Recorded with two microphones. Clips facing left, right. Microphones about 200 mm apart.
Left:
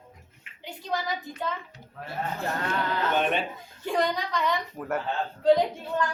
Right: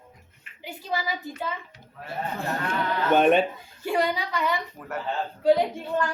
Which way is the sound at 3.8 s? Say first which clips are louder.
Right 1 dB; 10° right (ahead or behind).